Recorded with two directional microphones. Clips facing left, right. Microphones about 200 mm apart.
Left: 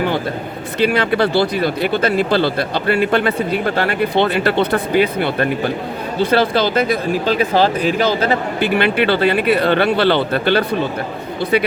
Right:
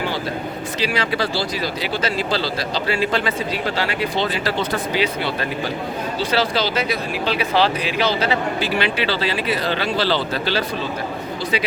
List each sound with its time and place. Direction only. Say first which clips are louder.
0.8 s speech: left 8 dB; 55° left (ahead or behind)